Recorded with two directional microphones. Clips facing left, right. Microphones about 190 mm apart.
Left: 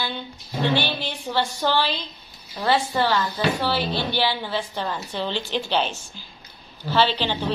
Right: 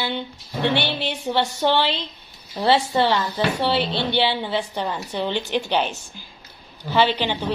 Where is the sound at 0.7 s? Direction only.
70° right (ahead or behind).